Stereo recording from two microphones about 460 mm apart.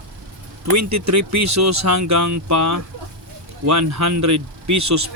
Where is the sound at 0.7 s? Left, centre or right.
Right.